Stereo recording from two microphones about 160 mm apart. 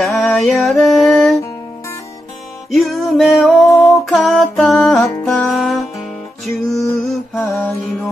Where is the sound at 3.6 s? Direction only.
20° left (ahead or behind).